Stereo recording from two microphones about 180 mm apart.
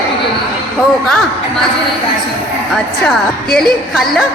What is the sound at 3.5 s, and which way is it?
Speech, centre (ahead or behind).